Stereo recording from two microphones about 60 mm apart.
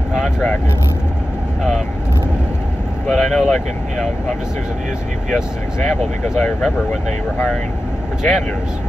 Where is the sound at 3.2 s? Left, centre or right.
Centre.